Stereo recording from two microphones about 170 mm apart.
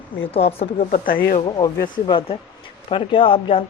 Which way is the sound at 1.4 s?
25° left (ahead or behind).